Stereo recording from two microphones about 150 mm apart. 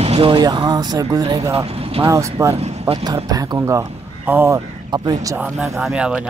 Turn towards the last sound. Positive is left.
turn(degrees=-5)  # may be behind; listen again after turning